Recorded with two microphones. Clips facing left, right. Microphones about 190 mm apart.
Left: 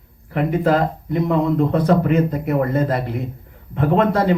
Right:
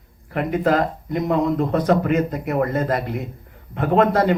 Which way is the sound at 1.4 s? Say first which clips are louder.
Left 3 dB; 55° left (ahead or behind).